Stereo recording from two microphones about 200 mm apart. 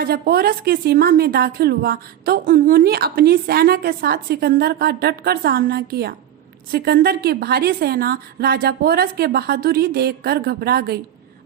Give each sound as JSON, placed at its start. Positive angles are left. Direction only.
{"t": 0.0, "sound": "a woman's voice", "side_deg": -50}